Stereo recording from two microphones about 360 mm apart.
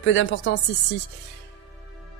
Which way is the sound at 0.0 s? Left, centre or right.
Left.